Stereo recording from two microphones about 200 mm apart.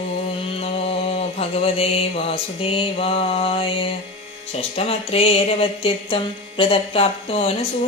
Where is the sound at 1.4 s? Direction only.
30° left (ahead or behind).